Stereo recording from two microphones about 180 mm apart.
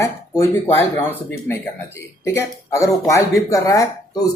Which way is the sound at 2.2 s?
15° left (ahead or behind).